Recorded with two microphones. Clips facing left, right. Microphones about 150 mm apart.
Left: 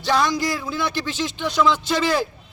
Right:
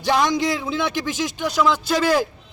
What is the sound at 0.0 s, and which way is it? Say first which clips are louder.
A man's voice: right 1 dB; 15° right (ahead or behind).